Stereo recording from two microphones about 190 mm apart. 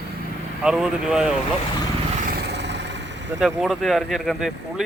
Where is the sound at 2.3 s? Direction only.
60° right (ahead or behind).